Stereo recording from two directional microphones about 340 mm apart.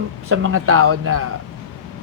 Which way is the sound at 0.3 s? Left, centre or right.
Right.